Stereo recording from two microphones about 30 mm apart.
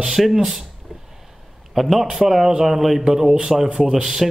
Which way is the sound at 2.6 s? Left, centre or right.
Centre.